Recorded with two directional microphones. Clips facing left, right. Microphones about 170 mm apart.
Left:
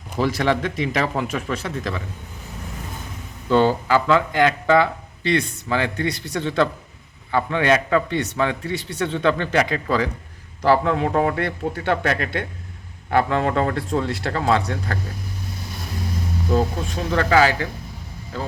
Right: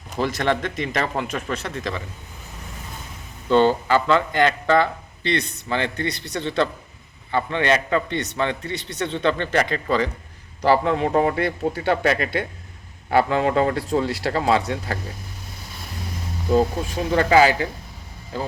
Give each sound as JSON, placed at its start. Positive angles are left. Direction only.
{"t": 0.2, "sound": "speech", "side_deg": 5}
{"t": 3.5, "sound": "speech", "side_deg": 5}
{"t": 17.1, "sound": "speech", "side_deg": -20}